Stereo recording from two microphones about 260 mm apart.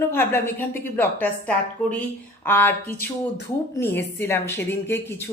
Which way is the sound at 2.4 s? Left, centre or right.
Centre.